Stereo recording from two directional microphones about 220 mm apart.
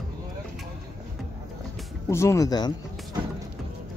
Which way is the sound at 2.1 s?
10° left (ahead or behind).